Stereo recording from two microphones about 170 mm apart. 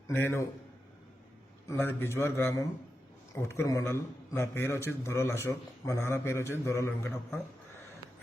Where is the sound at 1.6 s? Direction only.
10° left (ahead or behind).